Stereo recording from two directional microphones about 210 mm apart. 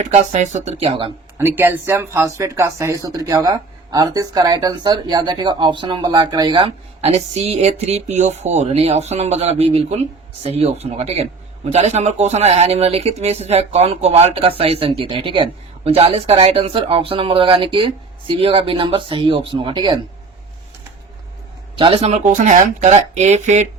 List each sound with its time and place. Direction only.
0.0 s speech: 35° right (ahead or behind)
1.4 s a man's voice: 10° right (ahead or behind)
21.8 s speech: 25° right (ahead or behind)